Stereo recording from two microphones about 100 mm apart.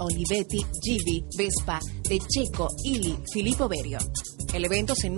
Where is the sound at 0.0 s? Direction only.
10° right (ahead or behind).